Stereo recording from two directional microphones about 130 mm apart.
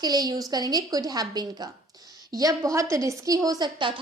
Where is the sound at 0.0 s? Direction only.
30° right (ahead or behind).